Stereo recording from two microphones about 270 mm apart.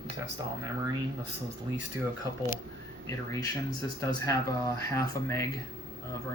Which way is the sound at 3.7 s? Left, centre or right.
Centre.